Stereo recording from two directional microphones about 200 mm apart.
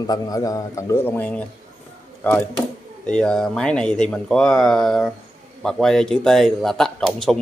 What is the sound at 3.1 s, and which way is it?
A man's voice, 5° left (ahead or behind).